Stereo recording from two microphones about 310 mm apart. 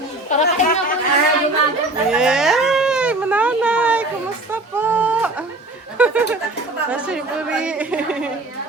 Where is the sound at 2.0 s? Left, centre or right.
Centre.